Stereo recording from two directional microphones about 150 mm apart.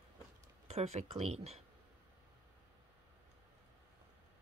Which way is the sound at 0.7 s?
45° right (ahead or behind).